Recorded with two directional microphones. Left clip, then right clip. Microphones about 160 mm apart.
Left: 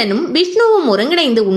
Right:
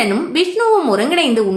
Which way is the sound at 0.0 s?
35° left (ahead or behind).